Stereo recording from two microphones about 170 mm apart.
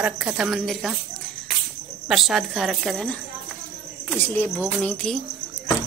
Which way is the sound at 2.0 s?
5° right (ahead or behind).